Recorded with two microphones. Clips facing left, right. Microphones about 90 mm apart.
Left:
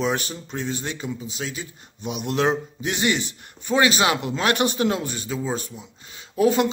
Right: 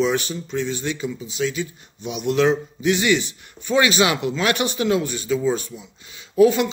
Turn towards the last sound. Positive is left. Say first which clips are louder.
# right 4 dB
turn(degrees=40)  # may be behind; listen again after turning